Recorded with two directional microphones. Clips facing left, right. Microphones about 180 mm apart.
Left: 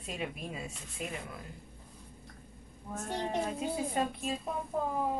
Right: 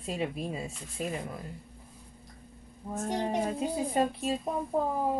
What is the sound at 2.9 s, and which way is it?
Speech, 15° right (ahead or behind).